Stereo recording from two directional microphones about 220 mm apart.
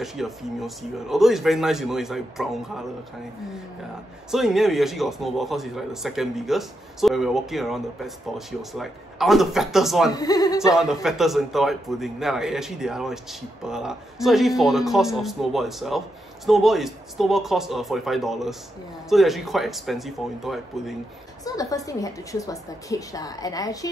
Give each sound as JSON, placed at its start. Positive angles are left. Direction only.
{"t": 0.0, "sound": "a man's voice", "side_deg": 0}
{"t": 4.3, "sound": "a man's voice", "side_deg": 0}
{"t": 10.1, "sound": "a woman's voice", "side_deg": 15}
{"t": 10.7, "sound": "a man's voice", "side_deg": 0}
{"t": 21.5, "sound": "a woman's voice", "side_deg": 15}